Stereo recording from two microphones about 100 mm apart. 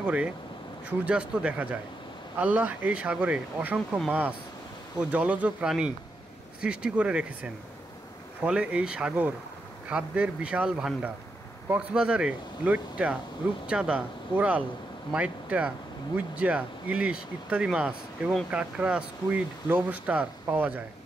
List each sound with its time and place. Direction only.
0.0 s speech: 15° right (ahead or behind)